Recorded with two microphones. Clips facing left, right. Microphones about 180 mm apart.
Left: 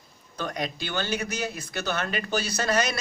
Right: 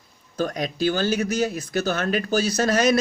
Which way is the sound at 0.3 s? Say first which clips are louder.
Right 6 dB; 45° right (ahead or behind).